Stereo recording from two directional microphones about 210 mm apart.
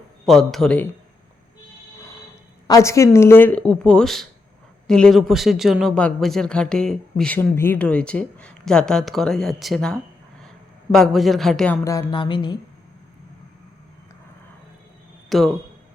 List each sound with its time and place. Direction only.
0.3 s speech: centre (ahead or behind)
2.6 s speech: 15° left (ahead or behind)
15.3 s speech: centre (ahead or behind)